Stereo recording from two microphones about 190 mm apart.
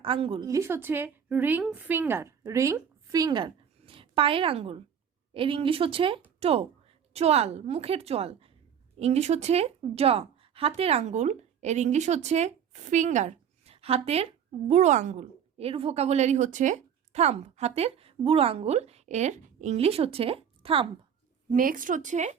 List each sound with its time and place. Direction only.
0.0 s a woman's voice: 30° right (ahead or behind)
0.4 s a woman's voice: 15° right (ahead or behind)
21.5 s a woman's voice: 45° right (ahead or behind)